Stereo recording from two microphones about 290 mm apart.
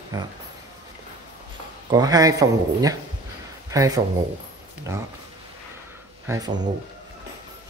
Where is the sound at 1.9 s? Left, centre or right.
Centre.